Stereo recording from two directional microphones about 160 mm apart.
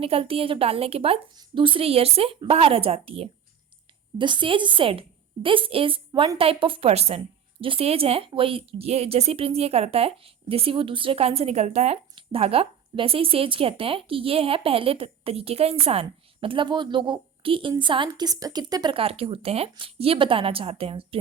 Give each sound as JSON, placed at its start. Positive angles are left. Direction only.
{"t": 0.0, "sound": "speech", "side_deg": -35}